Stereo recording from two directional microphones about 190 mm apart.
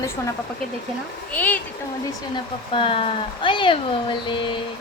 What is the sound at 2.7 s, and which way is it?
Speech, 30° left (ahead or behind).